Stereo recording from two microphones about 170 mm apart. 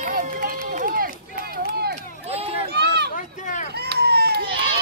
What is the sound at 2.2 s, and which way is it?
Run, 35° right (ahead or behind).